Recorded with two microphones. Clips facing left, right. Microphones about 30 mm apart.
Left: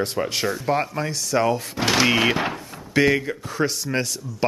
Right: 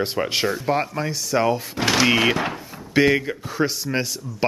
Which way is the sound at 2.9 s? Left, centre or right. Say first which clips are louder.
Right 1 dB; centre.